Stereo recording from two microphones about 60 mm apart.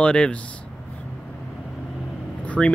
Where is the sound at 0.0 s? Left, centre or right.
Centre.